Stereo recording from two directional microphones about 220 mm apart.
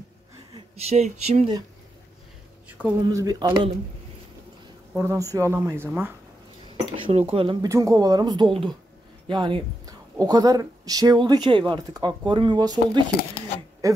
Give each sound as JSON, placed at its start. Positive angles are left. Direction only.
{"t": 0.6, "sound": "speech", "side_deg": -30}
{"t": 2.8, "sound": "speech", "side_deg": -15}
{"t": 4.9, "sound": "speech", "side_deg": -15}
{"t": 7.1, "sound": "speech", "side_deg": -25}